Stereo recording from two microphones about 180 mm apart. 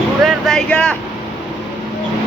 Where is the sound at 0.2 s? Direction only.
Centre (ahead or behind).